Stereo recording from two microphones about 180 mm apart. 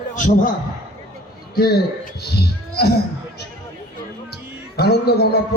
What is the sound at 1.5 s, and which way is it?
Speech, 60° left (ahead or behind).